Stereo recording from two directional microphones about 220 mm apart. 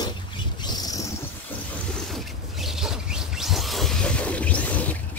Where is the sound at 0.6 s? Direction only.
20° left (ahead or behind).